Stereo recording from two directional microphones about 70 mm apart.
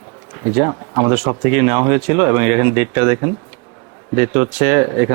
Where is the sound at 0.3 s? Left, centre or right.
Right.